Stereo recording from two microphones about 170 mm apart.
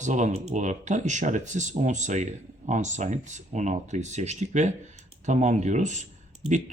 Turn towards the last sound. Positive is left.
turn(degrees=-45)  # may be behind; listen again after turning